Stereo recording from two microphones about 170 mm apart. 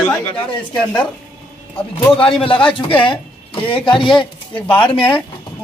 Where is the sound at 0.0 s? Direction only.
10° left (ahead or behind).